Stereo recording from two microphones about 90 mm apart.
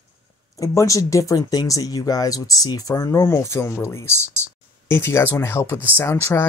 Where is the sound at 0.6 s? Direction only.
35° left (ahead or behind).